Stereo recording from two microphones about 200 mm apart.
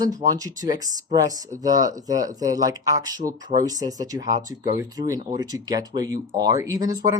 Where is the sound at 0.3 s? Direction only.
15° right (ahead or behind).